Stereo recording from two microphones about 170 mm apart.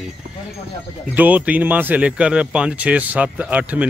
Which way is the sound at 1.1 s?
10° right (ahead or behind).